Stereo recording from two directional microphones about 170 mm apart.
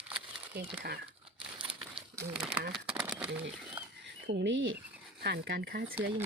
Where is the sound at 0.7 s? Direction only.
65° right (ahead or behind).